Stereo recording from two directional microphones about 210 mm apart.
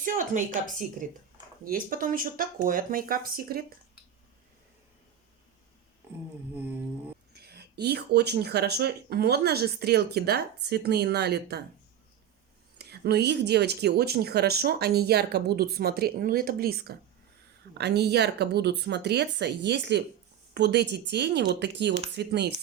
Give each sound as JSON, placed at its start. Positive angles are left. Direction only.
{"t": 0.0, "sound": "a woman's voice", "side_deg": -40}
{"t": 6.5, "sound": "a sound", "side_deg": -10}
{"t": 7.3, "sound": "speech", "side_deg": -50}
{"t": 12.8, "sound": "speech", "side_deg": -50}